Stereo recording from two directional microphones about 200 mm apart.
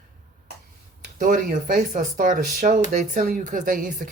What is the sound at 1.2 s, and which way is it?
Speech, 45° right (ahead or behind).